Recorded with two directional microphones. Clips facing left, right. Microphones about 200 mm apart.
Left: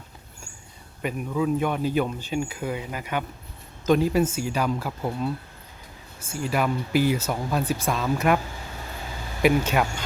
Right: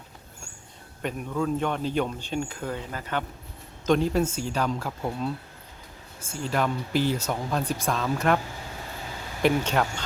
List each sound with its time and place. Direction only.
1.0 s speech: 5° left (ahead or behind)
9.4 s speech: 10° left (ahead or behind)